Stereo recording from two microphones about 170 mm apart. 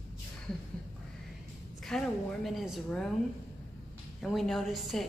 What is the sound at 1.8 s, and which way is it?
A woman's voice, centre (ahead or behind).